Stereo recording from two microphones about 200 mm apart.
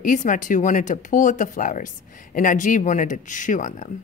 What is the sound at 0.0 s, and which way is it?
A woman's voice, 40° left (ahead or behind).